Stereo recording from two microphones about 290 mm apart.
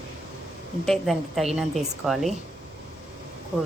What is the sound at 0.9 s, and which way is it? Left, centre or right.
A woman's voice, centre.